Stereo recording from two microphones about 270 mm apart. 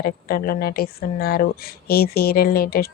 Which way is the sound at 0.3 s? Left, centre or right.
Left.